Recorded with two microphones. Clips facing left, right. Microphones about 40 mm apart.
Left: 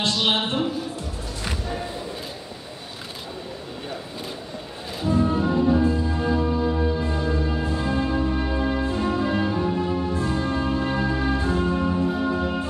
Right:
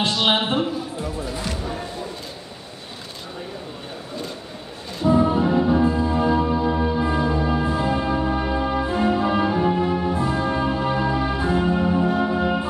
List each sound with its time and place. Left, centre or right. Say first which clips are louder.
0.0 s a sound: right 2 dB; centre
5.0 s music: right 4 dB; right
8.8 s music: right 3 dB; right
9.6 s music: right 3 dB; right